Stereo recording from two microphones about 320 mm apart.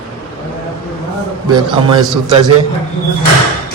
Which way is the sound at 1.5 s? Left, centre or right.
Centre.